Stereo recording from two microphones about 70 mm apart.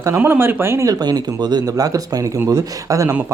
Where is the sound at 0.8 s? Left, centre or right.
Right.